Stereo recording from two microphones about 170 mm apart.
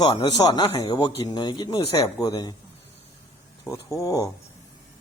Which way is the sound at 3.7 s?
20° left (ahead or behind).